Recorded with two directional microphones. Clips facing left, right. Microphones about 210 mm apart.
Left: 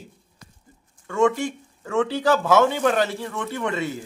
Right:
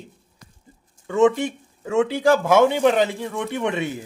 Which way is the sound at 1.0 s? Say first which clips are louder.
Right 3 dB; 20° right (ahead or behind).